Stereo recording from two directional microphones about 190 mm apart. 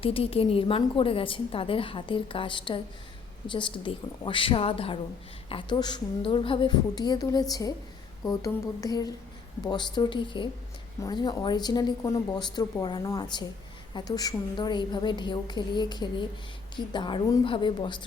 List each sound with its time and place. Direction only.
0.0 s a woman's voice: 30° left (ahead or behind)